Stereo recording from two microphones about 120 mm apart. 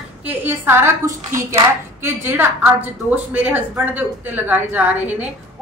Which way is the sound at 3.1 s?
15° right (ahead or behind).